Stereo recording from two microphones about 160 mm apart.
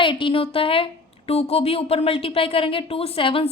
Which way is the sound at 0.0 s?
30° left (ahead or behind).